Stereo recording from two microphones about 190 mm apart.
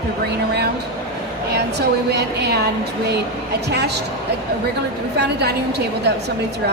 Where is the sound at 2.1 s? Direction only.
60° right (ahead or behind).